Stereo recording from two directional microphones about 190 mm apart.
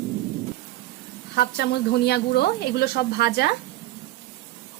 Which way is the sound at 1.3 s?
60° left (ahead or behind).